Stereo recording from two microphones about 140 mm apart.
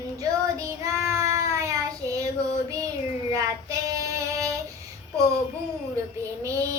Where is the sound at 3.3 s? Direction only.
25° right (ahead or behind).